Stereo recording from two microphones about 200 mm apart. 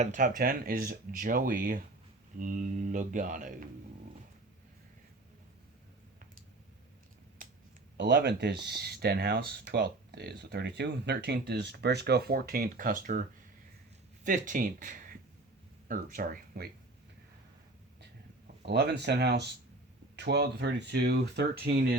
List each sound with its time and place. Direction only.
0.0 s speech: 40° right (ahead or behind)
7.4 s a sound: 40° right (ahead or behind)
7.9 s speech: 60° right (ahead or behind); by 13.2 s 40° right (ahead or behind)
14.3 s speech: 40° right (ahead or behind)
18.6 s speech: 55° right (ahead or behind)